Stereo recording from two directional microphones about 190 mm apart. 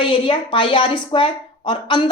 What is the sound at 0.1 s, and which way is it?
A woman's voice, 25° left (ahead or behind).